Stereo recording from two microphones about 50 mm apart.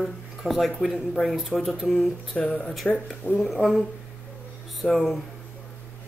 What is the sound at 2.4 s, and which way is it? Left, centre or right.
Speech, left.